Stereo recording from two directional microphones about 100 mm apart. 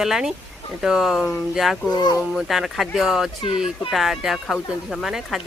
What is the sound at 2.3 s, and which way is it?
Speech, 5° right (ahead or behind).